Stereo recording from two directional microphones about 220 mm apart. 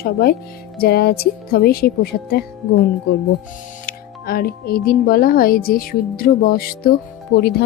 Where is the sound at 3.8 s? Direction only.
40° left (ahead or behind).